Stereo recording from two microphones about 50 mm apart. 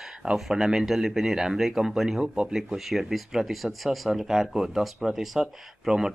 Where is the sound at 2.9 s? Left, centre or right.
Centre.